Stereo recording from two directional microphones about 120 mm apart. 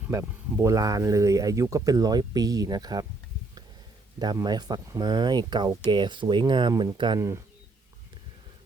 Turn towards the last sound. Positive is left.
turn(degrees=-25)  # may be behind; listen again after turning